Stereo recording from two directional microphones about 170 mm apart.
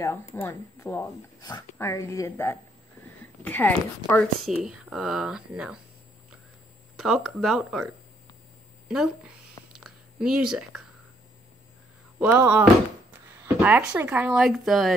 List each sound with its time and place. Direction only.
0.0 s a woman's voice: 15° left (ahead or behind)
4.6 s speech: 5° right (ahead or behind)
7.0 s speech: 5° right (ahead or behind)
8.8 s a sound: 5° right (ahead or behind)
12.2 s speech: 10° right (ahead or behind)